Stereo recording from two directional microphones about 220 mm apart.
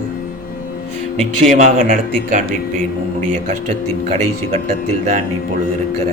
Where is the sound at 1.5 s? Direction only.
40° right (ahead or behind).